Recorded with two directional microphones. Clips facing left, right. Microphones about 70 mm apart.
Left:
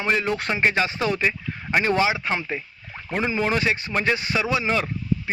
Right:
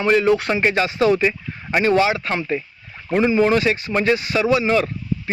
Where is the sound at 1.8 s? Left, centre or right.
Left.